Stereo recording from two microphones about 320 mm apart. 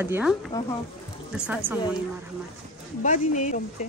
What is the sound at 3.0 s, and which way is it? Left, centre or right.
Speech, left.